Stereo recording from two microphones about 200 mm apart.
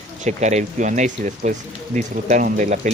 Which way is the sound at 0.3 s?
35° right (ahead or behind).